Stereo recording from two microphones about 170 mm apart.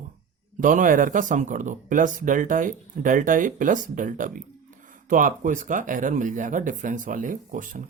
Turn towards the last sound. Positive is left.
turn(degrees=-50)  # may be behind; listen again after turning